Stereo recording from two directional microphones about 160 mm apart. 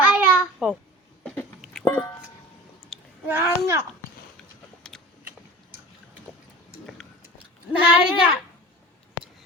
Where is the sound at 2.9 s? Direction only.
5° left (ahead or behind).